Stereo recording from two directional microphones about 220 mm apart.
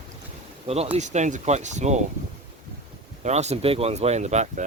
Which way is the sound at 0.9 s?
30° right (ahead or behind).